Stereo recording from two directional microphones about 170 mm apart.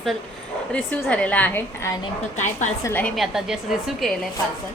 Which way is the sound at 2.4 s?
45° left (ahead or behind).